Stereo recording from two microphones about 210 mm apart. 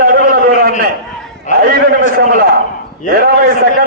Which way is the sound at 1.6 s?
45° right (ahead or behind).